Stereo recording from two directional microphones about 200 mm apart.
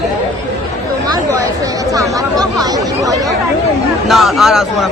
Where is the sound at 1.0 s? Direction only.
15° right (ahead or behind).